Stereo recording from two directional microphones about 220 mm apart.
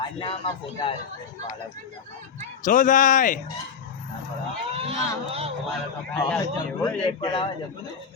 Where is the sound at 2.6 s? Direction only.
35° left (ahead or behind).